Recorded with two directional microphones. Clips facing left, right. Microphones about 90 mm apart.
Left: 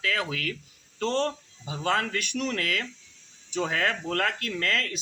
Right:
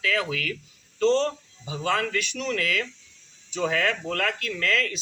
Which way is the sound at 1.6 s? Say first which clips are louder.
Right 1 dB; 40° left (ahead or behind).